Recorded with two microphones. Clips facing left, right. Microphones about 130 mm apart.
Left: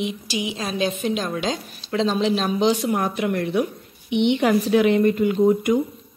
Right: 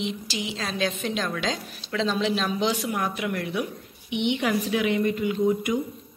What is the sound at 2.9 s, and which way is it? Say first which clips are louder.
A woman's voice: left 5 dB; 35° left (ahead or behind).